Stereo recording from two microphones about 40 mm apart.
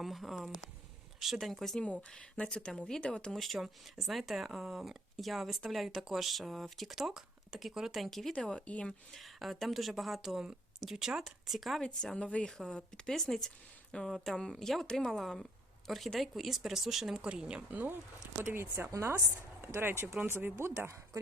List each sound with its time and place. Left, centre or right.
0.0 s a woman's voice: centre
2.0 s speech: left
3.3 s a woman's voice: centre
3.6 s a woman's voice: centre
6.9 s a woman's voice: centre
8.3 s speech: left
8.6 s speech: left
9.2 s a woman's voice: centre
10.9 s a woman's voice: centre
12.5 s a woman's voice: centre
17.2 s a woman's voice: right
17.7 s speech: right
18.5 s speech: right
19.6 s speech: right